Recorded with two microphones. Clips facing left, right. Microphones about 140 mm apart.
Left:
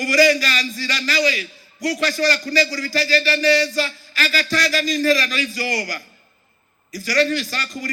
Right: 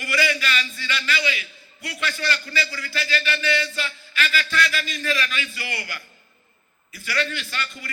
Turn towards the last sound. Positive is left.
turn(degrees=40)  # may be behind; listen again after turning